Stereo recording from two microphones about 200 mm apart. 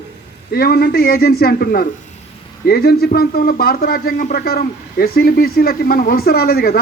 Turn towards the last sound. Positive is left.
turn(degrees=50)  # may be behind; listen again after turning